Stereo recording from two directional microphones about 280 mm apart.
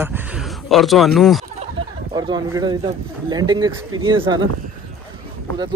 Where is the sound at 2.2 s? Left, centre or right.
Centre.